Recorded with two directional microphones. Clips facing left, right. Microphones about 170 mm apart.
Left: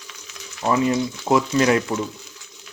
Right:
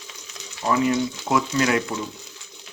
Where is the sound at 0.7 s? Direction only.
30° left (ahead or behind).